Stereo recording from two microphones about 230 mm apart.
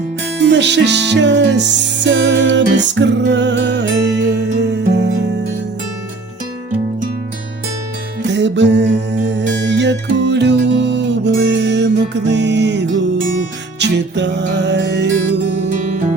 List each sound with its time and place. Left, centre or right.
0.3 s music: right
8.3 s music: right